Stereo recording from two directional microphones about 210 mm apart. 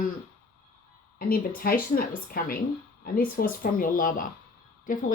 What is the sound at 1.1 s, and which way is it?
Speech, 45° left (ahead or behind).